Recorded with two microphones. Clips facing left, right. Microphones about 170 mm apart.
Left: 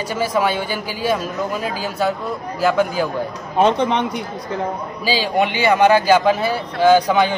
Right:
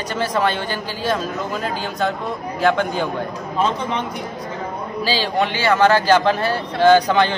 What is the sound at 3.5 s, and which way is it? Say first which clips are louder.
Speech: left 6 dB; 65° left (ahead or behind).